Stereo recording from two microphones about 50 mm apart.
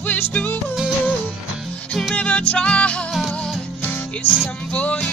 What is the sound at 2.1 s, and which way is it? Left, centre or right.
Music, left.